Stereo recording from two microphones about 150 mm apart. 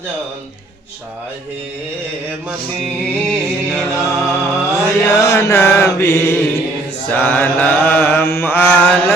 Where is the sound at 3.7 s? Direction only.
20° left (ahead or behind).